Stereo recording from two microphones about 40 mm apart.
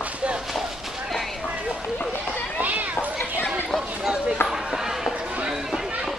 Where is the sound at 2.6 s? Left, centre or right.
Right.